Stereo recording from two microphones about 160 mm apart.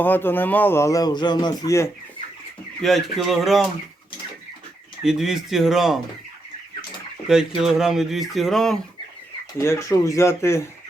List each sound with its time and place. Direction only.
0.0 s speech: 10° left (ahead or behind)
2.8 s speech: centre (ahead or behind)
5.0 s speech: 5° right (ahead or behind)
7.3 s speech: 5° right (ahead or behind)
9.6 s speech: 15° left (ahead or behind)